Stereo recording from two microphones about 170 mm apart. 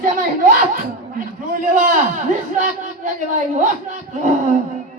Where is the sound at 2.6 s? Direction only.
45° right (ahead or behind).